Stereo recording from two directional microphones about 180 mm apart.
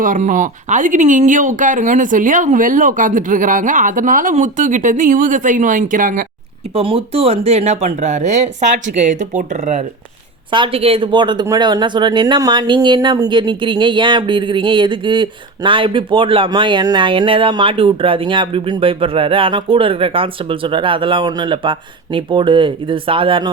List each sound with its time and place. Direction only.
0.0 s speech: 45° right (ahead or behind)
6.7 s speech: 30° right (ahead or behind)
10.5 s speech: 30° right (ahead or behind)